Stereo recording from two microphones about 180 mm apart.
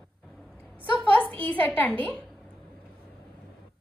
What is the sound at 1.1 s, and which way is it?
A child's voice, 10° left (ahead or behind).